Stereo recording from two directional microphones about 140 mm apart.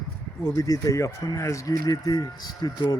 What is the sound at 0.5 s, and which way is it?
Speech, 25° left (ahead or behind).